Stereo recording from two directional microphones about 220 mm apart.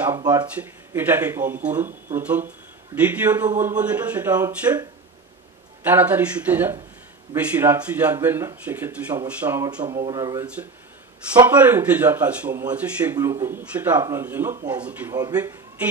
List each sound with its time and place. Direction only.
0.0 s speech: 15° right (ahead or behind)
5.9 s speech: 10° right (ahead or behind)